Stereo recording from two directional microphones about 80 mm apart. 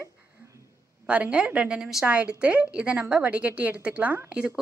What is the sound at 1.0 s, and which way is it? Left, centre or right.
A woman's voice, centre.